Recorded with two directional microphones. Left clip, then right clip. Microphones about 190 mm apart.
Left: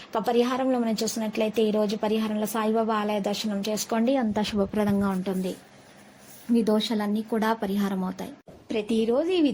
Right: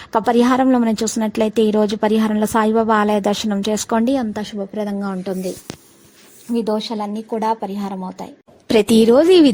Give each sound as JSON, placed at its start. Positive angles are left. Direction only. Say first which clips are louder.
{"t": 0.1, "sound": "a woman's voice", "louder": "right 9 dB", "side_deg": -45}
{"t": 4.7, "sound": "speech", "louder": "right 2 dB", "side_deg": -5}
{"t": 6.5, "sound": "speech", "louder": "right 4 dB", "side_deg": -15}
{"t": 8.6, "sound": "a woman's voice", "louder": "right 13 dB", "side_deg": -70}